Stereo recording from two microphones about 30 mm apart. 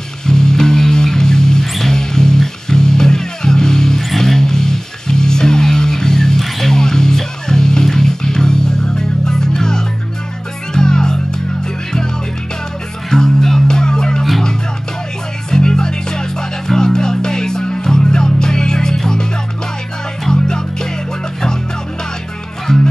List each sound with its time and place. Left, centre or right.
0.3 s music: left
13.1 s music: centre
15.5 s music: left
20.2 s music: left
22.7 s music: left